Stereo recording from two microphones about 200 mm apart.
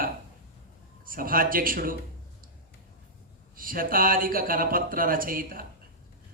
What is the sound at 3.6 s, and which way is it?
Speech, 45° right (ahead or behind).